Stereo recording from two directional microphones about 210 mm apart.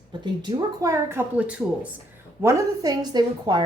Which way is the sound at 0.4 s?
15° right (ahead or behind).